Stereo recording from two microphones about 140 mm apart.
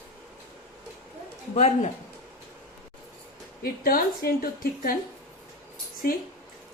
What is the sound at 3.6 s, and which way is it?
A woman's voice, 90° left.